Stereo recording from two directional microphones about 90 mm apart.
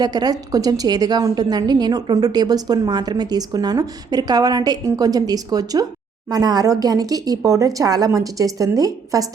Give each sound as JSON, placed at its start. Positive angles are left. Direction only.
{"t": 0.0, "sound": "a woman's voice", "side_deg": -50}